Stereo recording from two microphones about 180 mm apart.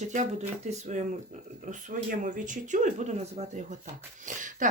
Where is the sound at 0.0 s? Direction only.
40° right (ahead or behind).